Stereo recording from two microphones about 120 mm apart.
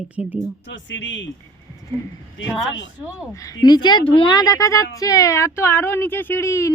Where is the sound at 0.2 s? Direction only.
10° right (ahead or behind).